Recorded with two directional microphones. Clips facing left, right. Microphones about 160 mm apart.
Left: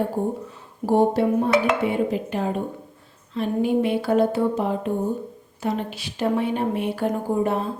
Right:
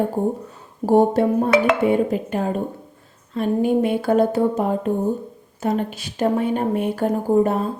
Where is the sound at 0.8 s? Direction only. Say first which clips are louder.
Right 3 dB; 50° right (ahead or behind).